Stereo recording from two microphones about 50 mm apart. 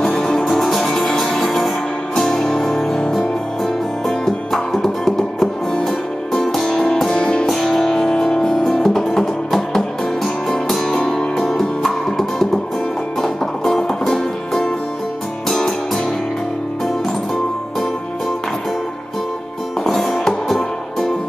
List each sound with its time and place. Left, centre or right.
0.0 s music: centre
4.5 s music: centre
7.4 s music: centre
19.8 s music: centre